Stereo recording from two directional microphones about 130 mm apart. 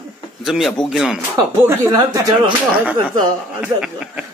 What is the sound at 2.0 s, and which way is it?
Speech, 35° right (ahead or behind).